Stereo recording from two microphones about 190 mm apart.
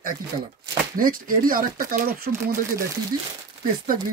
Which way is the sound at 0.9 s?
45° right (ahead or behind).